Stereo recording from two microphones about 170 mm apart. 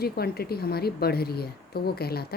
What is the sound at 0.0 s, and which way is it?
A woman's voice, 65° left (ahead or behind).